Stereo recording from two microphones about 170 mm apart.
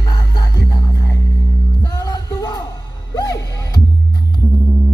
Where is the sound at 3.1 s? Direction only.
20° left (ahead or behind).